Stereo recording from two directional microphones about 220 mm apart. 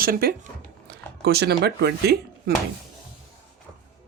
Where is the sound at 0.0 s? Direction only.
45° right (ahead or behind).